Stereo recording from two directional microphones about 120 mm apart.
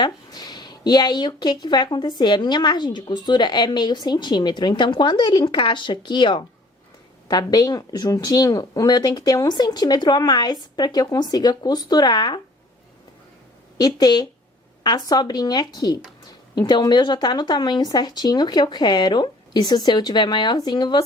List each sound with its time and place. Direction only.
0.0 s speech: 35° left (ahead or behind)
13.7 s speech: 35° left (ahead or behind)